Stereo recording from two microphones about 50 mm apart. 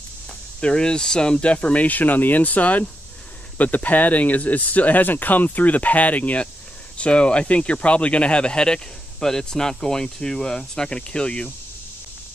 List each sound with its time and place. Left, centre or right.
0.6 s speech: centre
1.4 s speech: left
7.0 s speech: left